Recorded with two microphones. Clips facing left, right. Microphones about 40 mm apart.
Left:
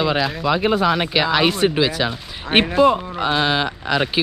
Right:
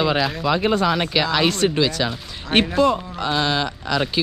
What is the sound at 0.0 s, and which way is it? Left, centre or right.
Speech, centre.